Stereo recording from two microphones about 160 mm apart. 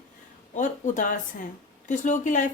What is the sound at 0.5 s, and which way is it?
A woman's voice, 50° left (ahead or behind).